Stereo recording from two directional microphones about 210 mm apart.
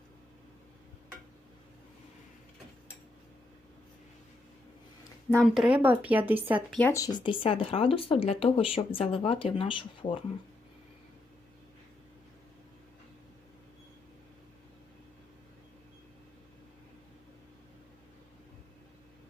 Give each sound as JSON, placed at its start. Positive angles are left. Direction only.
{"t": 5.3, "sound": "a woman's voice", "side_deg": 0}
{"t": 6.7, "sound": "speech", "side_deg": 10}